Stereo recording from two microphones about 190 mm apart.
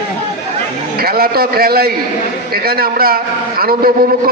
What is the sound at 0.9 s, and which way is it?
A man's voice, 55° right (ahead or behind).